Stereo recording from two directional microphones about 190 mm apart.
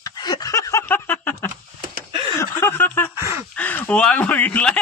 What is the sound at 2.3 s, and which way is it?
Snicker, 10° left (ahead or behind).